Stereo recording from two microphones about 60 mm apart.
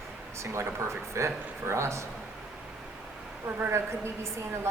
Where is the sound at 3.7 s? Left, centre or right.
Right.